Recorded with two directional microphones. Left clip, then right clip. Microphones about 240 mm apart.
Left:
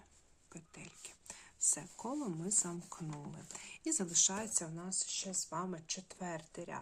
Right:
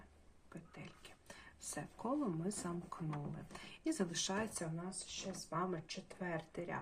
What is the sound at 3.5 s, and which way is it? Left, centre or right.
Speech, left.